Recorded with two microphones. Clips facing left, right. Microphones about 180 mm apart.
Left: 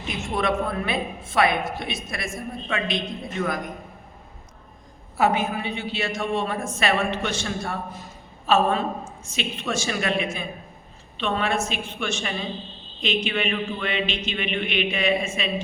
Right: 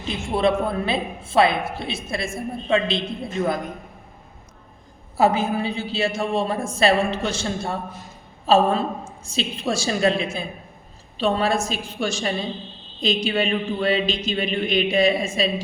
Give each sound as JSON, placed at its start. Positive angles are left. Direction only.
{"t": 0.0, "sound": "a woman's voice", "side_deg": -30}
{"t": 5.1, "sound": "a woman's voice", "side_deg": -30}